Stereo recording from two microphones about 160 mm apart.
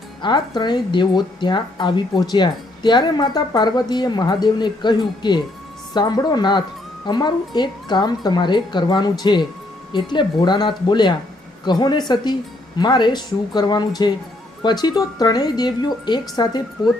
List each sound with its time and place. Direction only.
0.2 s a woman's voice: 30° left (ahead or behind)